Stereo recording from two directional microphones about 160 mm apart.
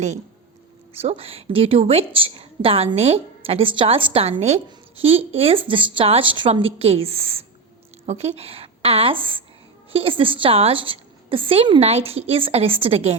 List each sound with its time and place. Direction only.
0.9 s a woman's voice: 40° right (ahead or behind)